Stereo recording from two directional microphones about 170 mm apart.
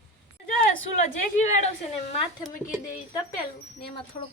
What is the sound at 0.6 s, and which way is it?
A woman's voice, 45° left (ahead or behind).